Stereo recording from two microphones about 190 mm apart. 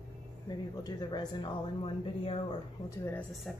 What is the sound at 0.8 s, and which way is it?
Speech, 20° left (ahead or behind).